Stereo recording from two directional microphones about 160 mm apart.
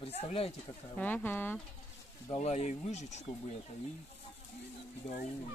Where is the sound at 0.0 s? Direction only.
40° left (ahead or behind).